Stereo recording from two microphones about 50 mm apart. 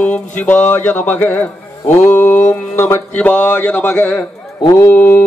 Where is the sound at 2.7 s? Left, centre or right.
Left.